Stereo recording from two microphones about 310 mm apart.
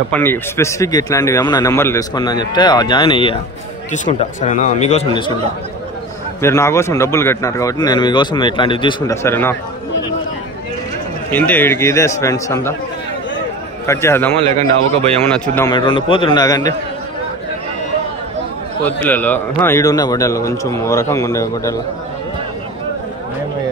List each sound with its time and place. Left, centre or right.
0.1 s speech: centre
6.4 s speech: centre
11.2 s speech: centre
13.8 s speech: centre
19.0 s speech: centre